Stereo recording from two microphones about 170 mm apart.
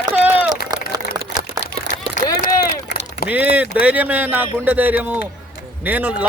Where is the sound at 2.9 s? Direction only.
65° left (ahead or behind).